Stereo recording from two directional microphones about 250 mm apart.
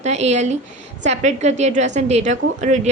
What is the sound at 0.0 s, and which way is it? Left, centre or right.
A woman's voice, right.